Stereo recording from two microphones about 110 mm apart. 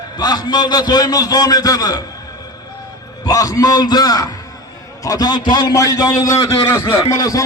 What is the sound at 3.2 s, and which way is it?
A man's voice, 30° left (ahead or behind).